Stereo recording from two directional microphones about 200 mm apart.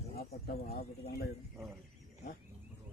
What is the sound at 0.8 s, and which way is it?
Speech, 50° left (ahead or behind).